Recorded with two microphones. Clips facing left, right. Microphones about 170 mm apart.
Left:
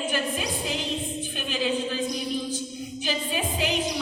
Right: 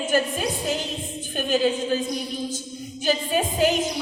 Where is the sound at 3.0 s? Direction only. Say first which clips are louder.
Right 6 dB; 45° right (ahead or behind).